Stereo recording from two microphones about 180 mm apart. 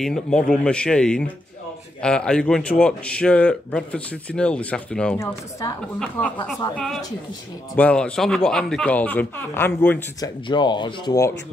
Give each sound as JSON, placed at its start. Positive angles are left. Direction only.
{"t": 0.0, "sound": "speech", "side_deg": 5}
{"t": 7.7, "sound": "speech", "side_deg": 5}
{"t": 10.2, "sound": "speech", "side_deg": 25}